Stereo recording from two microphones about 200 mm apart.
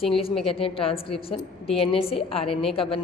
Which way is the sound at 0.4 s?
30° left (ahead or behind).